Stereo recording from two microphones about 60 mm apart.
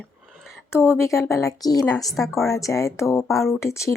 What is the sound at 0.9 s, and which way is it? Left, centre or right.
Speech, left.